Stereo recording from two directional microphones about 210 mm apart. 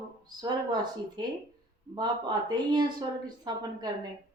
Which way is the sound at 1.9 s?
20° right (ahead or behind).